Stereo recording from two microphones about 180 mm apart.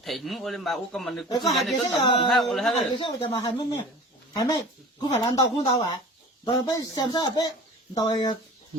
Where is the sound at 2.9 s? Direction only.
25° left (ahead or behind).